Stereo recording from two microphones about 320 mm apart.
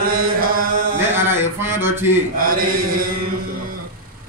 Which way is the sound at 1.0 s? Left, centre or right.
Centre.